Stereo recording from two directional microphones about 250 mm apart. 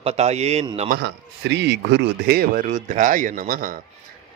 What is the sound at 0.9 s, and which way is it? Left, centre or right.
Speech, right.